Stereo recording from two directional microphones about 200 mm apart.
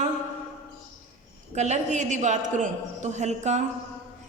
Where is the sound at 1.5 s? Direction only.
35° right (ahead or behind).